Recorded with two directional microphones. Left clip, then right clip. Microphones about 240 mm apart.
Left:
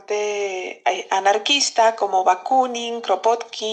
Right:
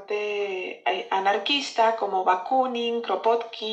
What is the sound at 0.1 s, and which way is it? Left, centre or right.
Speech, left.